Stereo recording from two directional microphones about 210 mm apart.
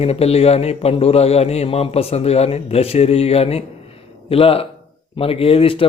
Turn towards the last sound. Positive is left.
turn(degrees=25)  # may be behind; listen again after turning